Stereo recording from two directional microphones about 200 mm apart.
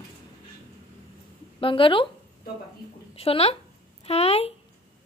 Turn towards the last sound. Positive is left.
turn(degrees=30)  # may be behind; listen again after turning